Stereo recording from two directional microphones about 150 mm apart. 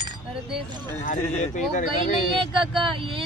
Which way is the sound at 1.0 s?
55° left (ahead or behind).